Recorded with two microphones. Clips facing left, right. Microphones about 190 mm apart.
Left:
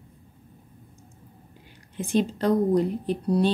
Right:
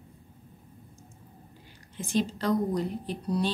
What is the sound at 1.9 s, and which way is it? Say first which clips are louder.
Speech: left 4 dB; 55° left (ahead or behind).